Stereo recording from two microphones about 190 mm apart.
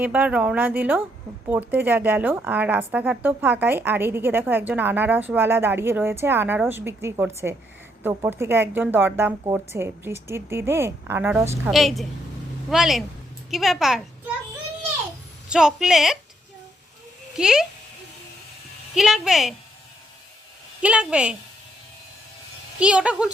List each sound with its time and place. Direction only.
0.0 s a woman's voice: 10° right (ahead or behind)
11.7 s a woman's voice: centre (ahead or behind)
15.4 s a woman's voice: 5° right (ahead or behind)
17.3 s a woman's voice: 5° right (ahead or behind)
18.9 s a woman's voice: centre (ahead or behind)
20.8 s a woman's voice: 5° right (ahead or behind)
22.8 s a woman's voice: 5° right (ahead or behind)